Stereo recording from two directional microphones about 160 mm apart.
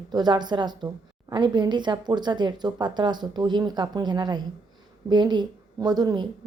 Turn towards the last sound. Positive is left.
turn(degrees=-25)  # may be behind; listen again after turning